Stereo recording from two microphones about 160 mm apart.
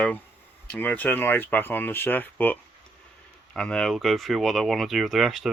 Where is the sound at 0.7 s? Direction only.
10° left (ahead or behind).